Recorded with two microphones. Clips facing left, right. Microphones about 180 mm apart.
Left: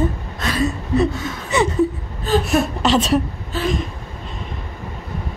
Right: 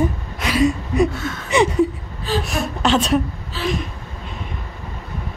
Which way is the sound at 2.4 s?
Centre (ahead or behind).